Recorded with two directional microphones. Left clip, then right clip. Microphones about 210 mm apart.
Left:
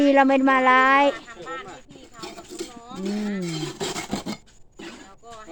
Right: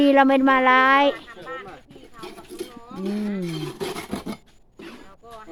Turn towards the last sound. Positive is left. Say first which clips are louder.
# left 1 dB
turn(degrees=30)  # may be behind; listen again after turning